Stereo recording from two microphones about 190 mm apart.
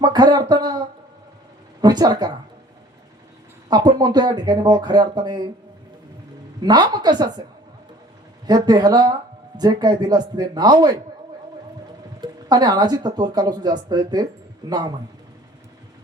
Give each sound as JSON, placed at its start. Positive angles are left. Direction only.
{"t": 0.0, "sound": "a sound", "side_deg": -20}
{"t": 1.8, "sound": "speech", "side_deg": -20}
{"t": 3.7, "sound": "speech", "side_deg": -20}
{"t": 6.6, "sound": "speech", "side_deg": -20}
{"t": 8.4, "sound": "speech", "side_deg": -20}
{"t": 12.2, "sound": "speech", "side_deg": -20}